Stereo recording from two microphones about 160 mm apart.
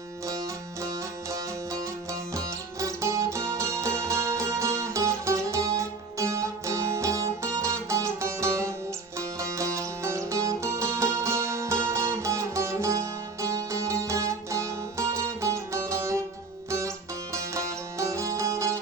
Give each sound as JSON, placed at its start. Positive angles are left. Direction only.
{"t": 0.3, "sound": "music", "side_deg": -20}